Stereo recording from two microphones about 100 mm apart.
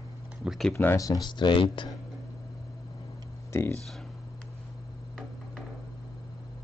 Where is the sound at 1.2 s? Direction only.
50° left (ahead or behind).